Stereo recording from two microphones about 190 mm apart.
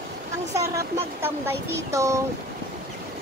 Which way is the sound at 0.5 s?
15° right (ahead or behind).